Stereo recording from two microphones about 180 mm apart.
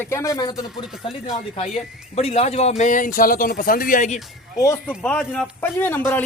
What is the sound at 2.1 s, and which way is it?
Speech, 35° left (ahead or behind).